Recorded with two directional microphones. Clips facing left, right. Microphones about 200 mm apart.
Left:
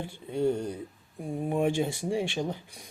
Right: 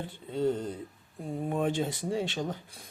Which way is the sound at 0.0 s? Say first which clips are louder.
Left 2 dB; 15° left (ahead or behind).